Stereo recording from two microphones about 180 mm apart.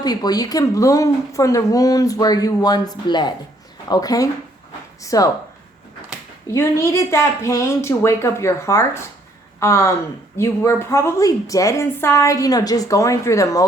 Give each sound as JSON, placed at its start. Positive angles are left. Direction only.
{"t": 0.0, "sound": "speech", "side_deg": 20}
{"t": 6.5, "sound": "a woman's voice", "side_deg": 15}